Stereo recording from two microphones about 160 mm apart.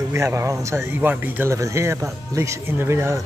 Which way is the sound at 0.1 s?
15° right (ahead or behind).